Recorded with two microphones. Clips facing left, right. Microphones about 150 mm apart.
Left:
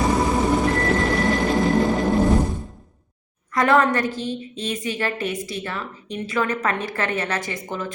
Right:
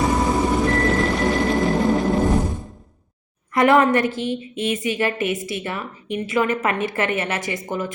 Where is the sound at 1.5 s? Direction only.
Centre (ahead or behind).